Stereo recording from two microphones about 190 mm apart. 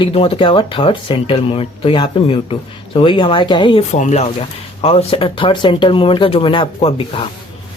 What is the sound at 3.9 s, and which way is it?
Speech, 40° left (ahead or behind).